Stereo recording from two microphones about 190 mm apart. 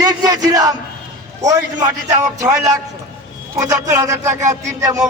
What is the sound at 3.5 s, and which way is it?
Speech, 15° right (ahead or behind).